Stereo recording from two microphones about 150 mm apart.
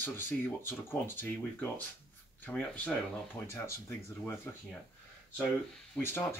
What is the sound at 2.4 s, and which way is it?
Speech, 10° left (ahead or behind).